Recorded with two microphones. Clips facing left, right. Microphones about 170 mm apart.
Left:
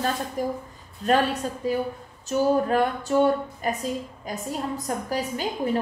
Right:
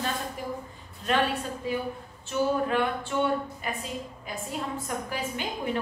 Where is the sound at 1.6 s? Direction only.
40° left (ahead or behind).